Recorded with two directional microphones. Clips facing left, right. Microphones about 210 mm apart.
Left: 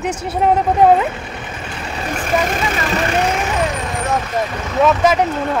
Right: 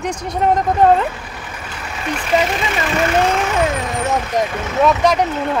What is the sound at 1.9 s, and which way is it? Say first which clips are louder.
Vehicle: right 1 dB; 40° left (ahead or behind).